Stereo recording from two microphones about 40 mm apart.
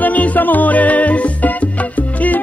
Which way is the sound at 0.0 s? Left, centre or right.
Left.